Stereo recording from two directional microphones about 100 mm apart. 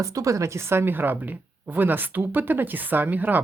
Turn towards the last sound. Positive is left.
turn(degrees=-20)  # may be behind; listen again after turning